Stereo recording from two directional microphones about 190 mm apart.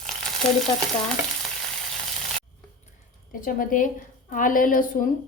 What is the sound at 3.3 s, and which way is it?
A woman's voice, 45° left (ahead or behind).